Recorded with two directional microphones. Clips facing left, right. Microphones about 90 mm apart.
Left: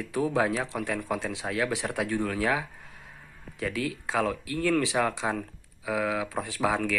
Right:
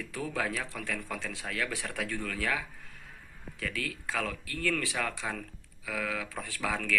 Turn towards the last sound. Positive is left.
turn(degrees=25)  # may be behind; listen again after turning